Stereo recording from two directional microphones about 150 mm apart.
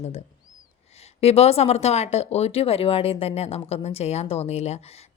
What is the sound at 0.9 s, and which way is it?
Speech, 45° left (ahead or behind).